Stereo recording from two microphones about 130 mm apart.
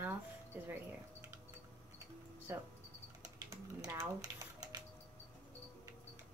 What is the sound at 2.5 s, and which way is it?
Speech, 20° right (ahead or behind).